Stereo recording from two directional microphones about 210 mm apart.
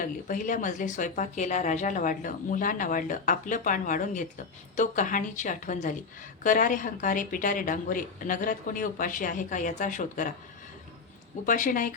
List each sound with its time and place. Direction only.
0.0 s speech: 40° left (ahead or behind)
11.4 s speech: 40° left (ahead or behind)